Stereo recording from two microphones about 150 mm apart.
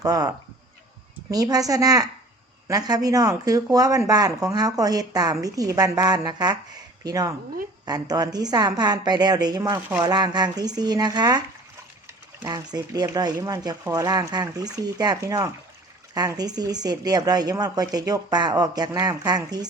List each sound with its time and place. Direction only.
0.0 s speech: 25° right (ahead or behind)
12.5 s speech: 25° right (ahead or behind)